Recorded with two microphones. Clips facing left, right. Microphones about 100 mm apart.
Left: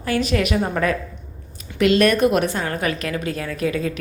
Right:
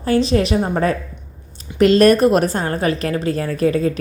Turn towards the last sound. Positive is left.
turn(degrees=-40)  # may be behind; listen again after turning